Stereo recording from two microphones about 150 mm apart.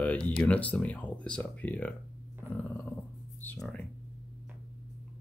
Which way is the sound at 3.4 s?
10° left (ahead or behind).